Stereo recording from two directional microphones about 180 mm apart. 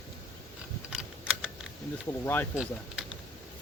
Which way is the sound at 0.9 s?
5° right (ahead or behind).